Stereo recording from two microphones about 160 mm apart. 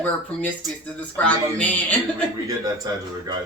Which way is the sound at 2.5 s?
25° right (ahead or behind).